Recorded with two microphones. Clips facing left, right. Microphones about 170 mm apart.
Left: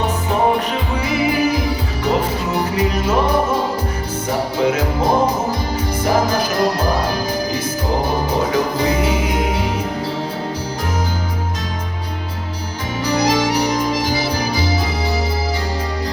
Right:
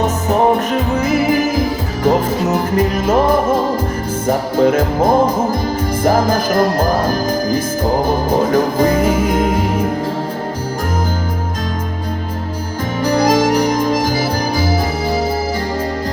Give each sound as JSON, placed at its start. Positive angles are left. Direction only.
{"t": 0.0, "sound": "music", "side_deg": -45}
{"t": 13.1, "sound": "music", "side_deg": -50}